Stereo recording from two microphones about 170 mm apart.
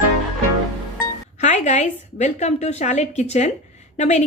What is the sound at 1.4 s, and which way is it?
A woman's voice, 45° left (ahead or behind).